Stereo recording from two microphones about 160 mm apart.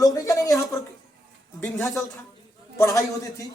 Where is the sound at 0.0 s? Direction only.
25° left (ahead or behind).